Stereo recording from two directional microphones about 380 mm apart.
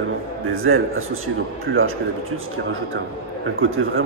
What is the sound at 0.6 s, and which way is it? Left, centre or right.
Speech, right.